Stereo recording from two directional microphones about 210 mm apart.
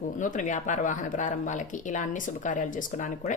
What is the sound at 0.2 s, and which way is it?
Speech, 35° left (ahead or behind).